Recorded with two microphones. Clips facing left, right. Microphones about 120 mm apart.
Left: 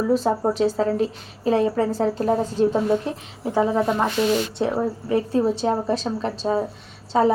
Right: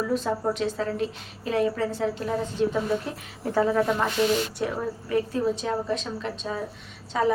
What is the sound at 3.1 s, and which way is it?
A woman's voice, 25° left (ahead or behind).